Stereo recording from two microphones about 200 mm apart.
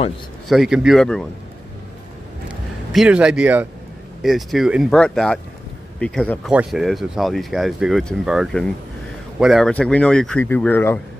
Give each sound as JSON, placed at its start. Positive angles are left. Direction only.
{"t": 0.5, "sound": "speech", "side_deg": 0}
{"t": 2.4, "sound": "a sound", "side_deg": -5}
{"t": 4.2, "sound": "speech", "side_deg": 0}